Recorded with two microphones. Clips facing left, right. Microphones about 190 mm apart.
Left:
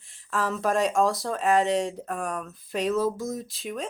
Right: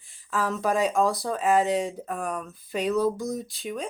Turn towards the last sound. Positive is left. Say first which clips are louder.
# right 1 dB
turn(degrees=0)  # may be behind; listen again after turning